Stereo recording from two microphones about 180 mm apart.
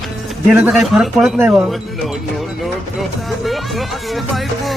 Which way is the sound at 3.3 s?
Centre (ahead or behind).